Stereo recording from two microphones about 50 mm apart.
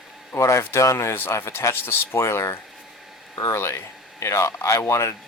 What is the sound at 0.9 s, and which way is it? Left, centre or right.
Speech, left.